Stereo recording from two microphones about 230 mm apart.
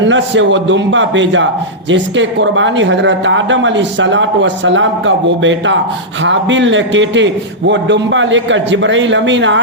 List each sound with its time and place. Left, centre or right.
0.0 s speech: right